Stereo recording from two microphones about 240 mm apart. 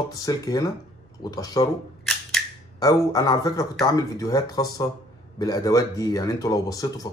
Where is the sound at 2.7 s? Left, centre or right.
Centre.